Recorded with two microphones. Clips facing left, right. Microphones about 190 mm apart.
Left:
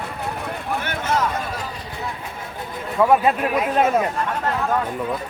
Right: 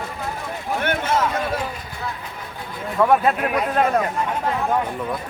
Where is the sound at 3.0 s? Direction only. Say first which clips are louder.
Left 1 dB; 5° left (ahead or behind).